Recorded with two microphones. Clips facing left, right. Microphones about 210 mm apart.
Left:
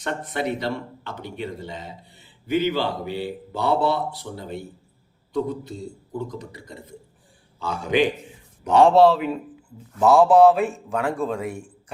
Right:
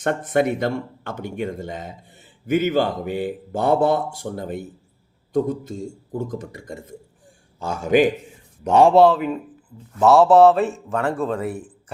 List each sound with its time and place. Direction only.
0.0 s speech: 50° right (ahead or behind)
9.0 s speech: centre (ahead or behind)